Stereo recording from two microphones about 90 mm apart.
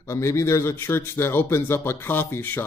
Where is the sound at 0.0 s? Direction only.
30° left (ahead or behind).